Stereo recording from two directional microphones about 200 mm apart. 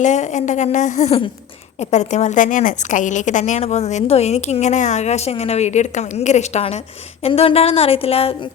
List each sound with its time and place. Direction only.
0.0 s a woman's voice: 35° left (ahead or behind)